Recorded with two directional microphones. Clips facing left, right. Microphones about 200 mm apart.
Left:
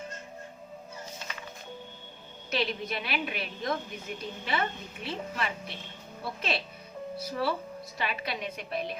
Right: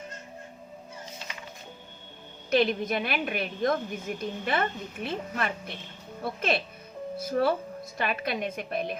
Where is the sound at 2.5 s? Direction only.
50° right (ahead or behind).